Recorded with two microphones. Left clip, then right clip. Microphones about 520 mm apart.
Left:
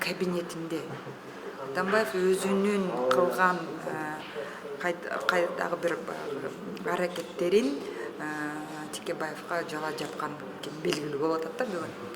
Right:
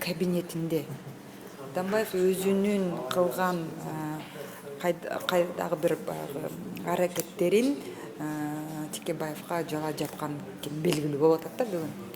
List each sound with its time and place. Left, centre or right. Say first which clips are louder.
0.0 s speech: even; right
4.8 s speech: right 1 dB; right
9.0 s speech: even; right